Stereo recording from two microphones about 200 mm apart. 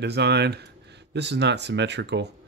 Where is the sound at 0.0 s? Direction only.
55° right (ahead or behind).